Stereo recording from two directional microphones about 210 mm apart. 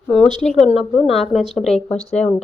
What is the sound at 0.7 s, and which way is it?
A woman's voice, centre (ahead or behind).